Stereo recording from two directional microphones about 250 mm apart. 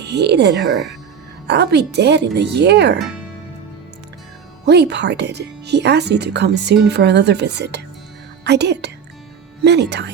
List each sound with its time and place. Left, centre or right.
0.0 s speech: right
4.6 s speech: right